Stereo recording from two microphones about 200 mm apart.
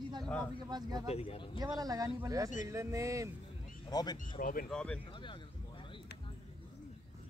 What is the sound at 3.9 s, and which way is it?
Speech, 20° left (ahead or behind).